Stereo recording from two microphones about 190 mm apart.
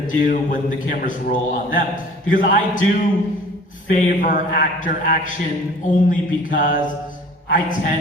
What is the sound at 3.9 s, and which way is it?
A man's voice, 45° left (ahead or behind).